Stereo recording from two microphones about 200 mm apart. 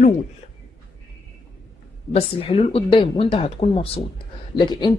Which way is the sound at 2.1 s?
30° left (ahead or behind).